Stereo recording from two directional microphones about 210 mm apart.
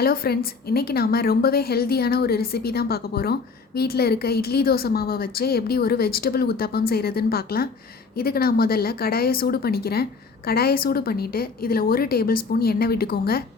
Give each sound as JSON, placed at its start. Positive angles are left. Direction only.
{"t": 0.0, "sound": "speech", "side_deg": 45}